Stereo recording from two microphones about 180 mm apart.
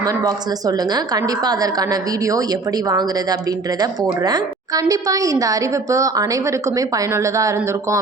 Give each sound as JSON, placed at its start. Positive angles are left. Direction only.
{"t": 0.0, "sound": "a woman's voice", "side_deg": -20}